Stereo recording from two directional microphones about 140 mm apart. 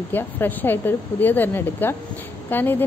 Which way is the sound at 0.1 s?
15° left (ahead or behind).